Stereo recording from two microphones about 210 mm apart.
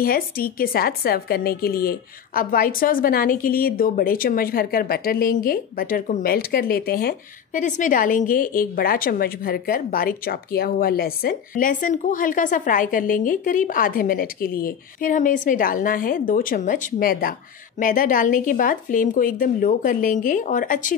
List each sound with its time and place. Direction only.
0.0 s a woman's voice: 45° left (ahead or behind)